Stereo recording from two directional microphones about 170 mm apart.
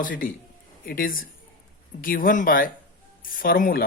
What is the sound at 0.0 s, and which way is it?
A man's voice, 55° left (ahead or behind).